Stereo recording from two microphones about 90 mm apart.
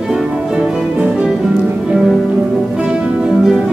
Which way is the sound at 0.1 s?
10° right (ahead or behind).